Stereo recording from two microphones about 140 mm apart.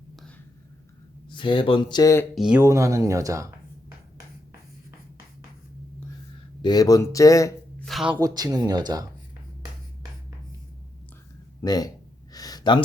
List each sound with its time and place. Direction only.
1.3 s speech: 35° left (ahead or behind)
2.3 s speech: 5° right (ahead or behind)
2.6 s speech: 20° right (ahead or behind)
6.6 s speech: 30° left (ahead or behind)
7.9 s speech: centre (ahead or behind)
8.2 s speech: 25° right (ahead or behind)
11.6 s speech: 30° left (ahead or behind)
12.3 s gasp: 25° left (ahead or behind)